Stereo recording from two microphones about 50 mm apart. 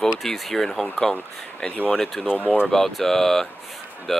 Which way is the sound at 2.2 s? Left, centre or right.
Left.